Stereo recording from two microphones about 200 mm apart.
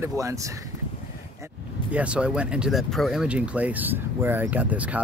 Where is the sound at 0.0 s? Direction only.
15° right (ahead or behind).